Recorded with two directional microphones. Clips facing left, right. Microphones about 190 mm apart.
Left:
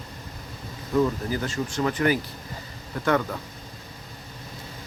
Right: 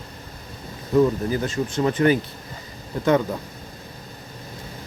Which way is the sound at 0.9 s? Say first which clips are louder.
Right 5 dB; 20° right (ahead or behind).